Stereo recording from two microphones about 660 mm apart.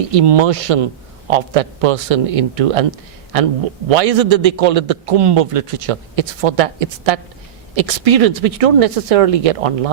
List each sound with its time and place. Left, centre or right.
0.1 s a man's voice: right